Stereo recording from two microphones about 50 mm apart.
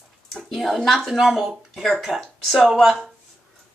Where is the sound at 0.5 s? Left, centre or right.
Centre.